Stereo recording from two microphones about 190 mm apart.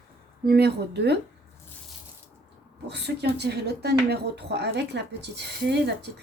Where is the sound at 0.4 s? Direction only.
60° right (ahead or behind).